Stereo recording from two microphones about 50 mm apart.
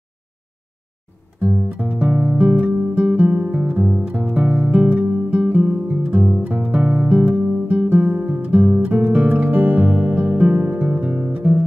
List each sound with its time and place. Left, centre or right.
1.4 s guitar: right
3.0 s music: right
4.3 s music: right
5.6 s music: right
6.4 s music: right
7.2 s guitar: right